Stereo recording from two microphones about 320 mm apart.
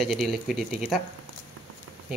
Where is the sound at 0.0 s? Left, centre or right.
Centre.